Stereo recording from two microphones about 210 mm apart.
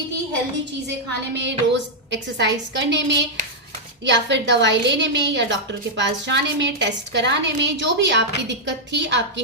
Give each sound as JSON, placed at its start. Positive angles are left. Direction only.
{"t": 1.3, "sound": "a woman's voice", "side_deg": -60}